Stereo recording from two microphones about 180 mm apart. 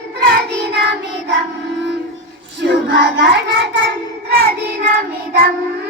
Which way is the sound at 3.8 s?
55° right (ahead or behind).